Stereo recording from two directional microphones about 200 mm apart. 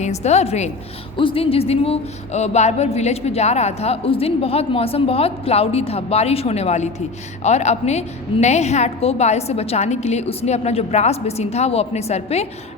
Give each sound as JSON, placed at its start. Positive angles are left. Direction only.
{"t": 0.0, "sound": "speech", "side_deg": 35}